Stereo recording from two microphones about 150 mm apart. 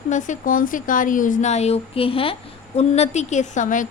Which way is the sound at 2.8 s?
50° left (ahead or behind).